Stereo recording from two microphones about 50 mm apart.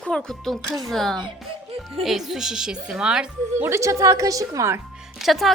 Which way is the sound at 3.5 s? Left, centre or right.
Right.